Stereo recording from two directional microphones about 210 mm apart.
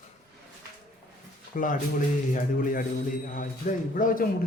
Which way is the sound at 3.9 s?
40° left (ahead or behind).